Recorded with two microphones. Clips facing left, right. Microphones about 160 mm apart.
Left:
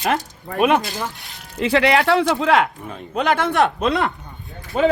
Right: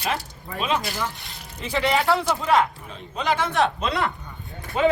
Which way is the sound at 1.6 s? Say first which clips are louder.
Left 6 dB; 90° left.